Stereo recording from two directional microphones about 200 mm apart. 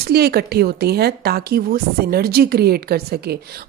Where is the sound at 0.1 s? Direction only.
50° right (ahead or behind).